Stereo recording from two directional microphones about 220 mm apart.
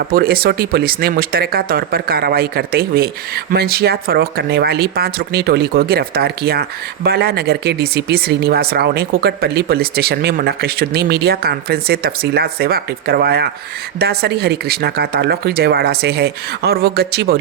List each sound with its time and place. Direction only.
0.1 s speech: 45° right (ahead or behind)